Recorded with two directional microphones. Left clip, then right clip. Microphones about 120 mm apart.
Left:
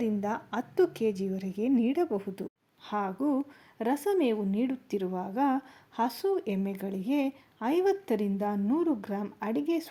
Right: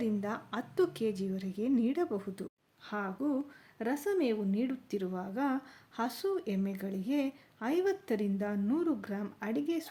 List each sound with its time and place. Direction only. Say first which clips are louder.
0.0 s a woman's voice: left 4 dB; 25° left (ahead or behind)